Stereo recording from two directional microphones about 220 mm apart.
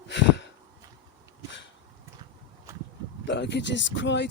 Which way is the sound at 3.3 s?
55° left (ahead or behind).